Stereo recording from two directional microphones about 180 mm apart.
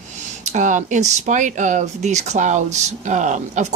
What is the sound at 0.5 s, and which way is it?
Speech, 45° right (ahead or behind).